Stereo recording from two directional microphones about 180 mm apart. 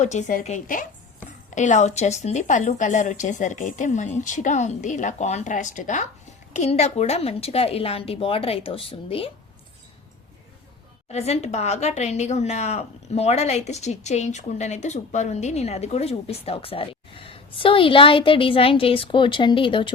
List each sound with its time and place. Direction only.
0.0 s speech: 40° left (ahead or behind)
11.1 s speech: 35° left (ahead or behind)